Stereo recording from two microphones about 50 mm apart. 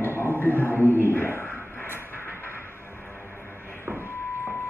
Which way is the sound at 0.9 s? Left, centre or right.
Left.